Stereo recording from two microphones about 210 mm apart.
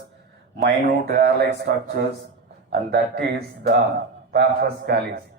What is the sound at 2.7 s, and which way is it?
A man's voice, 50° right (ahead or behind).